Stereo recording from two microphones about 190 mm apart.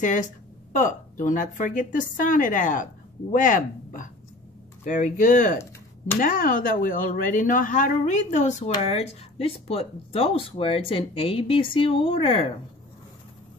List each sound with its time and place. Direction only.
0.0 s a woman's voice: 40° left (ahead or behind)